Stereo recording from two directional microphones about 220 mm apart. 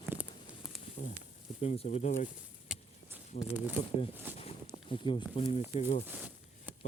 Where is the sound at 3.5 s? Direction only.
10° right (ahead or behind).